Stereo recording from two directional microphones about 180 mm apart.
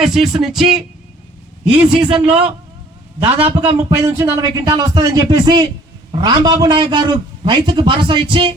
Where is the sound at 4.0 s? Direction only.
15° right (ahead or behind).